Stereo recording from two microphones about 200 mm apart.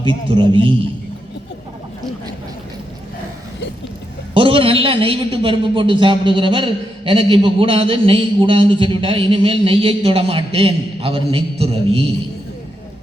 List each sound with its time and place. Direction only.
0.3 s a man's voice: 25° right (ahead or behind)
4.4 s a man's voice: 25° right (ahead or behind)